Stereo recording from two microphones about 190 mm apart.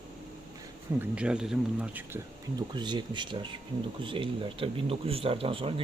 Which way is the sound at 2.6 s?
25° right (ahead or behind).